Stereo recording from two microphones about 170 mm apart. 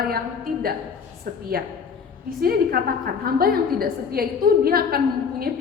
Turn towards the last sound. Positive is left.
turn(degrees=-60)  # may be behind; listen again after turning